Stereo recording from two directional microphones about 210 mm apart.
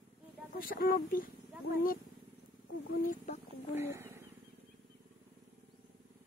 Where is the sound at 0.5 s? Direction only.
40° left (ahead or behind).